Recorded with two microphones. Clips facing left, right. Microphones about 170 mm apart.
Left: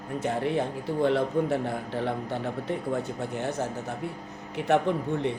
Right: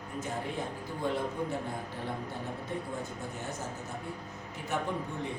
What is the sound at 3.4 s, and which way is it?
A man's voice, 75° left (ahead or behind).